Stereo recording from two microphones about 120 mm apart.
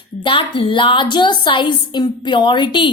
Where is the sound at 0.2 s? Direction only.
45° left (ahead or behind).